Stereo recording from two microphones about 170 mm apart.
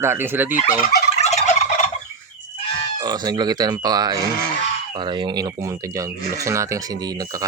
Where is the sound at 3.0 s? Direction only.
25° right (ahead or behind).